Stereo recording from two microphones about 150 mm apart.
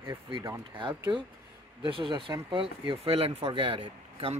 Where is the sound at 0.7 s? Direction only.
30° right (ahead or behind).